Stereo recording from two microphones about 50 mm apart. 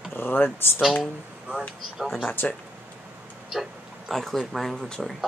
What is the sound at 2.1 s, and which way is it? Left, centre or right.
Speech, left.